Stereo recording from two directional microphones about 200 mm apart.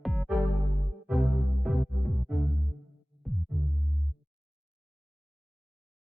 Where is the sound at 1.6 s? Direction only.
Centre (ahead or behind).